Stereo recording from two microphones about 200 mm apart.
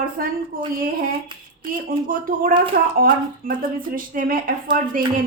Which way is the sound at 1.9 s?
45° right (ahead or behind).